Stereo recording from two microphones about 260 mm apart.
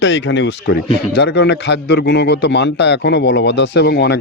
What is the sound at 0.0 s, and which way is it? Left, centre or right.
A man's voice, left.